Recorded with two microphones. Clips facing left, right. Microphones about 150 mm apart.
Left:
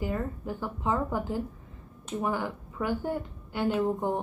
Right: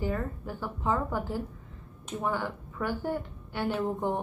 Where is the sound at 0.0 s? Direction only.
10° left (ahead or behind).